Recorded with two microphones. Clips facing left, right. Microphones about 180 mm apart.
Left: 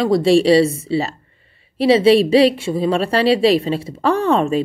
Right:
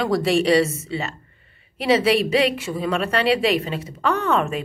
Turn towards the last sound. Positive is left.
turn(degrees=30)  # may be behind; listen again after turning